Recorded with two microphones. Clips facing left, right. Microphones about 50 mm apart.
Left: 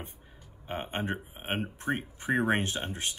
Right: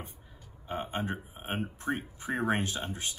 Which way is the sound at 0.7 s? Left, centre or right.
Left.